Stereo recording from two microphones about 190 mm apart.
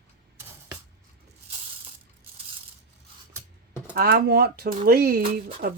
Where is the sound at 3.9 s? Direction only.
55° right (ahead or behind).